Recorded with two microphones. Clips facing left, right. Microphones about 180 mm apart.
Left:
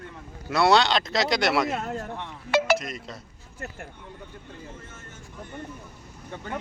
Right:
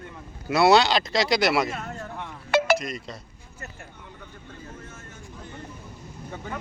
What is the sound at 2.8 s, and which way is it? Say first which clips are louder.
Speech: right 2 dB; 5° left (ahead or behind).